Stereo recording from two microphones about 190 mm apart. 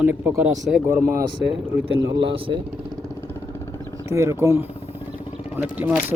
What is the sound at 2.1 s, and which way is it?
Speech, 70° right (ahead or behind).